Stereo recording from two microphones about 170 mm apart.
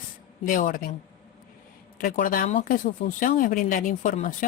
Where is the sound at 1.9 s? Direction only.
55° left (ahead or behind).